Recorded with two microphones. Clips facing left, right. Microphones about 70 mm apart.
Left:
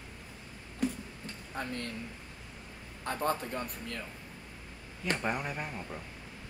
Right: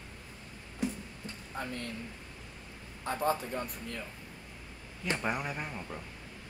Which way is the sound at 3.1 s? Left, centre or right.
Left.